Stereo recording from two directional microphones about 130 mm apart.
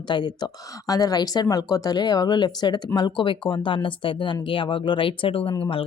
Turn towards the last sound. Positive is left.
turn(degrees=45)  # may be behind; listen again after turning